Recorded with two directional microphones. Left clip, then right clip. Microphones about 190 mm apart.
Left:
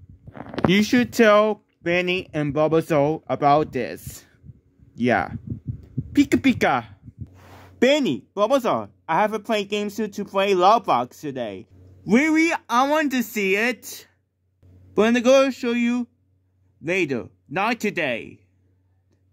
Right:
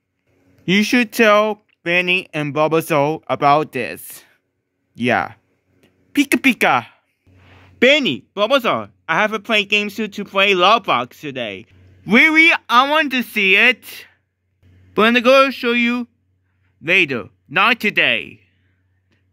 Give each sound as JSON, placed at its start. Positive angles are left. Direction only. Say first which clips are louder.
{"t": 0.7, "sound": "speech", "louder": "right 4 dB", "side_deg": -5}
{"t": 1.1, "sound": "speech", "louder": "right 2 dB", "side_deg": 5}
{"t": 4.9, "sound": "heart sounds", "louder": "right 3 dB", "side_deg": 0}
{"t": 7.8, "sound": "speech", "louder": "right 5 dB", "side_deg": -10}
{"t": 15.0, "sound": "speech", "louder": "right 5 dB", "side_deg": -5}